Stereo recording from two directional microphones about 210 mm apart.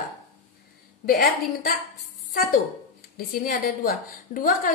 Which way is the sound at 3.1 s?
45° left (ahead or behind).